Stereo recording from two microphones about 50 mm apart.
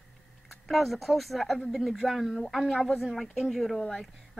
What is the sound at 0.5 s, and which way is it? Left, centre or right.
A woman's voice, centre.